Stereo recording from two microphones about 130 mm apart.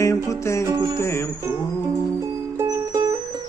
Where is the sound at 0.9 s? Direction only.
20° left (ahead or behind).